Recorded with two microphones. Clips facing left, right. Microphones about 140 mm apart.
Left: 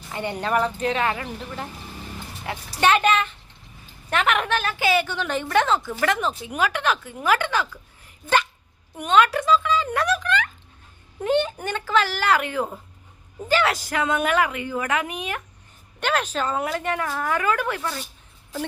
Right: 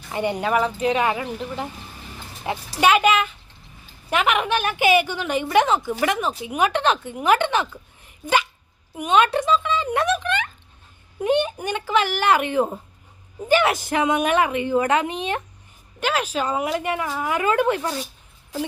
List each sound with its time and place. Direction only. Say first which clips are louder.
0.1 s a woman's voice: right 3 dB; 15° right (ahead or behind)
2.8 s a woman's voice: right 2 dB; 10° right (ahead or behind)
6.7 s a woman's voice: right 4 dB; 30° right (ahead or behind)
9.0 s a woman's voice: even; 10° right (ahead or behind)
9.2 s a woman's voice: even; 25° right (ahead or behind)
16.0 s a woman's voice: right 1 dB; 5° right (ahead or behind)
17.4 s a woman's voice: right 4 dB; 20° right (ahead or behind)